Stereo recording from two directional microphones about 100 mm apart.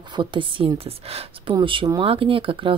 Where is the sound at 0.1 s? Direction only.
55° right (ahead or behind).